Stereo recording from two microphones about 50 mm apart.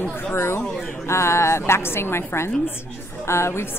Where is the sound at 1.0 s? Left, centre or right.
Left.